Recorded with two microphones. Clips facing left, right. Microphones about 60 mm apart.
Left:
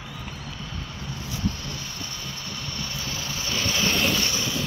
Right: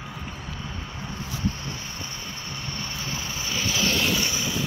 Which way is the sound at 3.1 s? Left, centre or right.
Right.